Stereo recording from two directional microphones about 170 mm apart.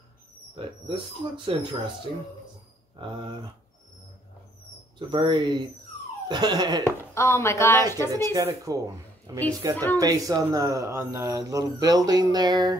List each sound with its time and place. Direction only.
0.6 s speech: 30° right (ahead or behind)
4.9 s speech: 25° right (ahead or behind)
6.8 s speech: 15° left (ahead or behind)
8.1 s speech: 20° right (ahead or behind)